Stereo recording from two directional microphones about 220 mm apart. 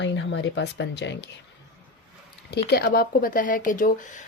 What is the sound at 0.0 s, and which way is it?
Speech, 55° left (ahead or behind).